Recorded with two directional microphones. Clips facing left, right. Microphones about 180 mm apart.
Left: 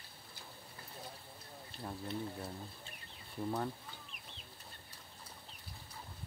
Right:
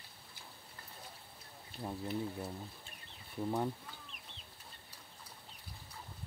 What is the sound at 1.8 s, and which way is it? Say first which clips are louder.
Speech: right 3 dB; 10° right (ahead or behind).